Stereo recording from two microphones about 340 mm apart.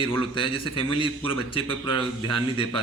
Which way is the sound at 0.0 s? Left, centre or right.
Centre.